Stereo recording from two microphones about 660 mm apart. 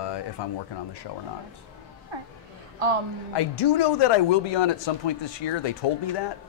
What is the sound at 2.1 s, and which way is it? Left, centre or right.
Speech, right.